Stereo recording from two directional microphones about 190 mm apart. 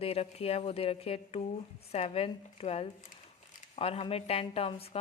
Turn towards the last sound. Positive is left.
turn(degrees=30)  # may be behind; listen again after turning